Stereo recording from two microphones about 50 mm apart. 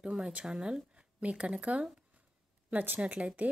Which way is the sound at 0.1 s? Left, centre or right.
Centre.